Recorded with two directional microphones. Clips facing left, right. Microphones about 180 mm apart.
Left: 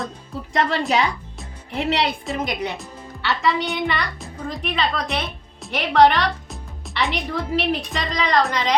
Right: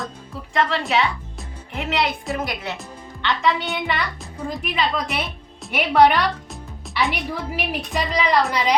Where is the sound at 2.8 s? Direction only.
5° left (ahead or behind).